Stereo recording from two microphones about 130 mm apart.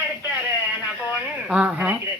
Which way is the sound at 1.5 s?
10° right (ahead or behind).